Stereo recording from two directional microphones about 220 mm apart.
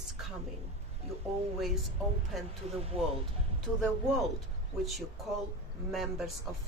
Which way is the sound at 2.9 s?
25° right (ahead or behind).